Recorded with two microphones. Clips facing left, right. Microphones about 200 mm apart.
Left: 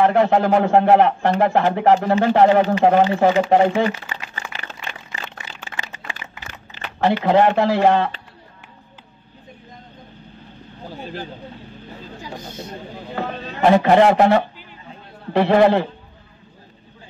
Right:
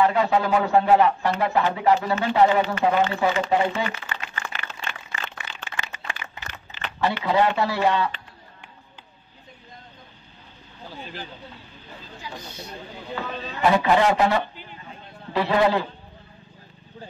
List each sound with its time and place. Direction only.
0.0 s a man's voice: 50° left (ahead or behind)
4.5 s a sound: 35° left (ahead or behind)
7.0 s a man's voice: 50° left (ahead or behind)
11.0 s vehicle: 40° left (ahead or behind)
12.2 s a man's voice: 45° left (ahead or behind)